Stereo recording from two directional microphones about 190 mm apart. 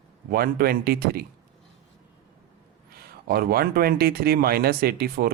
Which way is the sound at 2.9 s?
55° right (ahead or behind).